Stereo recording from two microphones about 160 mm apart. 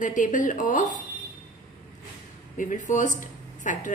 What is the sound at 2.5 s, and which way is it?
A woman's voice, 55° left (ahead or behind).